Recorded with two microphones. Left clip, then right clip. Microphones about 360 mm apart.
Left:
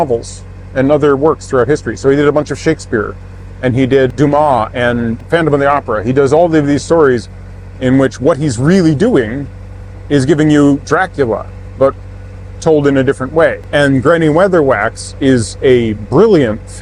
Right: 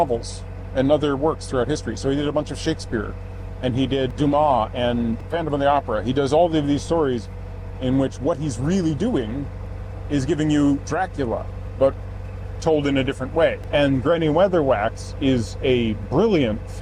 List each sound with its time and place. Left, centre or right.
0.0 s speech: left
5.5 s speech: left
12.5 s speech: left